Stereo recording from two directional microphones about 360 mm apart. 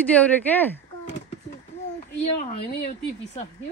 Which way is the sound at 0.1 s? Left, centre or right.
Centre.